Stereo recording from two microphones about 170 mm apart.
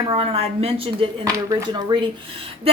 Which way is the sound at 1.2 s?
20° right (ahead or behind).